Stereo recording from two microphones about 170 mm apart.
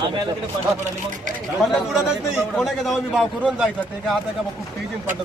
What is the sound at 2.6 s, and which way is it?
Speech, centre (ahead or behind).